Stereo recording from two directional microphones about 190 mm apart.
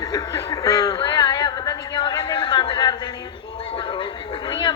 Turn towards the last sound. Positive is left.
turn(degrees=25)  # may be behind; listen again after turning